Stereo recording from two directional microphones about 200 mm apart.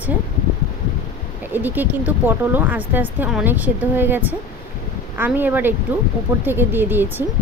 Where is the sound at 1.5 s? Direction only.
10° right (ahead or behind).